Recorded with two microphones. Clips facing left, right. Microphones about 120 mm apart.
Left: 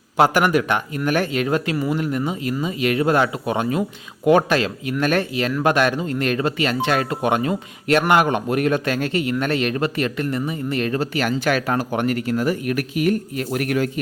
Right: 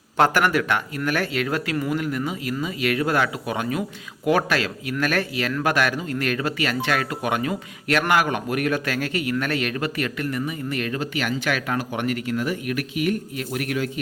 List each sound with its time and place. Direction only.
0.2 s speech: 15° left (ahead or behind); by 14.0 s 50° left (ahead or behind)